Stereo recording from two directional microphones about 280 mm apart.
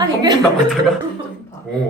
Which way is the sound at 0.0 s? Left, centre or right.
Centre.